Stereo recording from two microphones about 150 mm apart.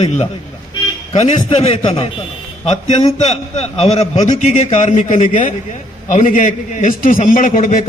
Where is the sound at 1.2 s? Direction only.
40° left (ahead or behind).